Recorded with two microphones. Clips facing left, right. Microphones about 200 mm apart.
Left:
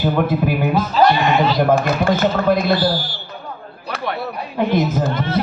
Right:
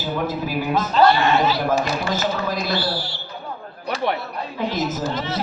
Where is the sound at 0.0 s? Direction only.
60° left (ahead or behind).